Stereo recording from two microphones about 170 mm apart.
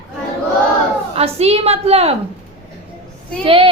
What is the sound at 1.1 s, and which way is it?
A woman's voice, 35° right (ahead or behind).